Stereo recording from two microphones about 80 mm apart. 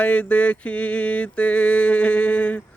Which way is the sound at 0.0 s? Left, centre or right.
Centre.